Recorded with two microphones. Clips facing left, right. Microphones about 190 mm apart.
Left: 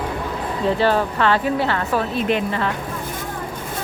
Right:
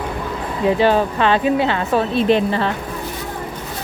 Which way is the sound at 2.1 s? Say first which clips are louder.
Right 5 dB; 30° right (ahead or behind).